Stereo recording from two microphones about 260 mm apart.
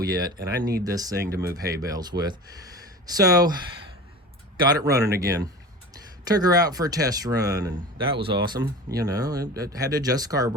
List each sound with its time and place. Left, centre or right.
0.0 s speech: centre